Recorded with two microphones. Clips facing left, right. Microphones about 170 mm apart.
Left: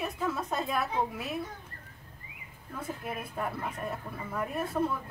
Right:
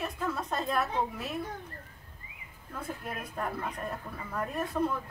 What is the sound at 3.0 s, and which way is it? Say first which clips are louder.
Speech: left 1 dB; 5° left (ahead or behind).